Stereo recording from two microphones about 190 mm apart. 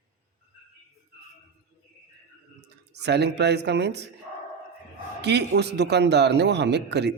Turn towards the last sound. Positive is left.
turn(degrees=-65)  # may be behind; listen again after turning